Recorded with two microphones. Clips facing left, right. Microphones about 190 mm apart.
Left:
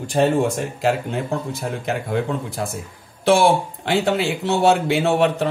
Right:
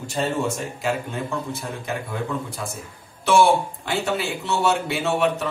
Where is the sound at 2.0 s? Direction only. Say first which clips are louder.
Left 5 dB; 60° left (ahead or behind).